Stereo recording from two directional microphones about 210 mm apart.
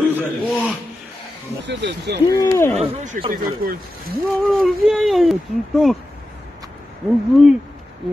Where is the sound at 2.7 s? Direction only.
35° right (ahead or behind).